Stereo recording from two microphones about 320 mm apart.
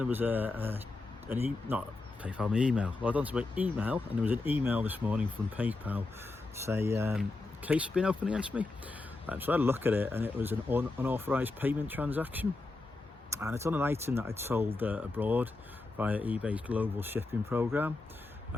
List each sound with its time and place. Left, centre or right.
0.0 s speech: centre